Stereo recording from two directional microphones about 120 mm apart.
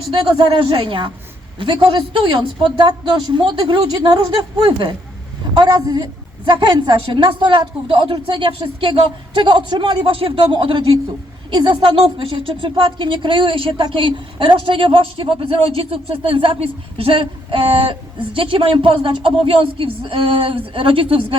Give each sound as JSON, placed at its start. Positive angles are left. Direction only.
{"t": 0.1, "sound": "speech", "side_deg": -40}
{"t": 5.5, "sound": "a woman's voice", "side_deg": -30}
{"t": 6.4, "sound": "speech", "side_deg": -40}